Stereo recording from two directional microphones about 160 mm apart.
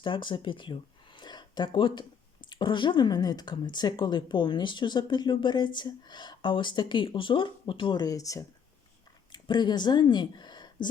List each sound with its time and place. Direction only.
0.0 s speech: 30° left (ahead or behind)